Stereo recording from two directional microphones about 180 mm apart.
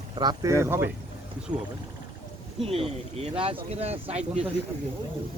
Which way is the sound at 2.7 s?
35° right (ahead or behind).